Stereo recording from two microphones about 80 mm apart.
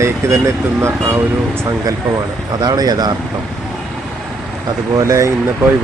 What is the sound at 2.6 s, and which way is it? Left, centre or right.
Speech, right.